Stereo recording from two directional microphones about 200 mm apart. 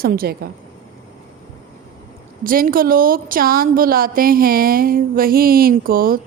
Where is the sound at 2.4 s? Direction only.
45° right (ahead or behind).